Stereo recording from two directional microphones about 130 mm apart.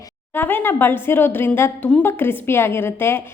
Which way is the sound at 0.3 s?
15° left (ahead or behind).